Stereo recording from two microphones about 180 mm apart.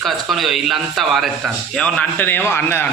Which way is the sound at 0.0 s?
Centre (ahead or behind).